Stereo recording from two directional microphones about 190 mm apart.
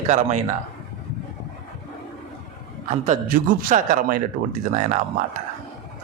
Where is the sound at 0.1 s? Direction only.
40° right (ahead or behind).